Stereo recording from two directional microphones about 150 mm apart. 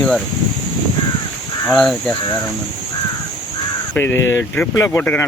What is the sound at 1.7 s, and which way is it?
Speech, 5° left (ahead or behind).